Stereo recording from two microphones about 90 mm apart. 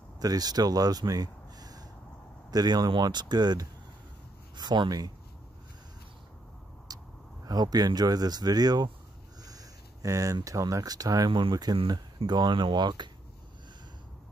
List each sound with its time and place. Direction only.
0.2 s speech: 45° right (ahead or behind)
6.9 s vehicle: 45° right (ahead or behind)
7.4 s speech: 45° right (ahead or behind)